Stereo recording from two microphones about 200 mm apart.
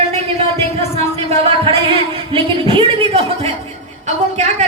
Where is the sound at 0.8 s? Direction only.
30° right (ahead or behind).